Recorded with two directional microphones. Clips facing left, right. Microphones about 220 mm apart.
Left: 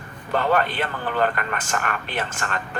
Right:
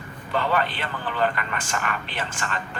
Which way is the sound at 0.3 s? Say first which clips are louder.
Left 3 dB; 50° left (ahead or behind).